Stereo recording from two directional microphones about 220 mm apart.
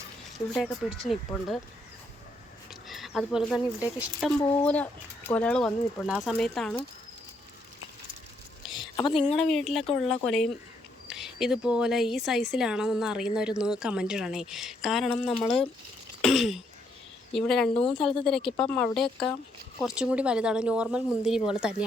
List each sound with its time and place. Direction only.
0.3 s a woman's voice: centre (ahead or behind)
2.6 s a sound: centre (ahead or behind)
3.9 s a woman's voice: 5° right (ahead or behind)
8.7 s a sound: 20° left (ahead or behind)
9.4 s a woman's voice: centre (ahead or behind)
17.7 s a woman's voice: 25° left (ahead or behind)
18.3 s a woman's voice: 5° left (ahead or behind)